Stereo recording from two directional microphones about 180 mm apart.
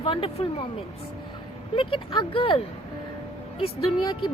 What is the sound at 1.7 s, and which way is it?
Speech, 30° left (ahead or behind).